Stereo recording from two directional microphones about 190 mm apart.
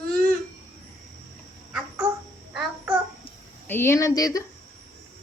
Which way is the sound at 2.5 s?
5° right (ahead or behind).